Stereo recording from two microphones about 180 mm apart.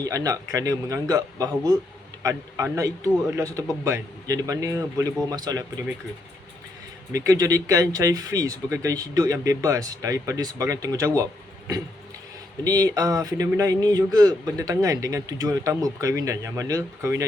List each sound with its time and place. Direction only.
0.0 s a man's voice: 20° right (ahead or behind)
7.1 s speech: 20° right (ahead or behind)
12.6 s speech: 20° right (ahead or behind)